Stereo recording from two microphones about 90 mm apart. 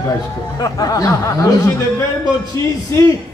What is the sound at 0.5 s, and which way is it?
Speech, 45° left (ahead or behind).